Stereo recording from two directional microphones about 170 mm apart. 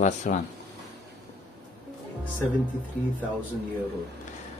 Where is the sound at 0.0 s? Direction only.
45° left (ahead or behind).